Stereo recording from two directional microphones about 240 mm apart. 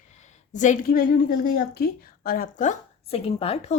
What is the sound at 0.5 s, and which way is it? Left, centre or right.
A woman's voice, left.